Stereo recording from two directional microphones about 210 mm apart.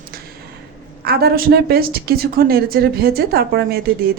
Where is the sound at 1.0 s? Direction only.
50° right (ahead or behind).